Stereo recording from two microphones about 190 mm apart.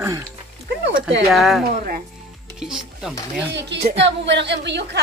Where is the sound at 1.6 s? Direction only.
50° right (ahead or behind).